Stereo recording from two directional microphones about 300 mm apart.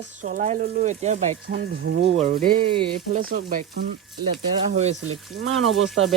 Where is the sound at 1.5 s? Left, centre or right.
Right.